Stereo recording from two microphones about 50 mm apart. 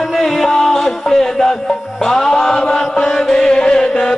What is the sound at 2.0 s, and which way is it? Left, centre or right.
Chant, centre.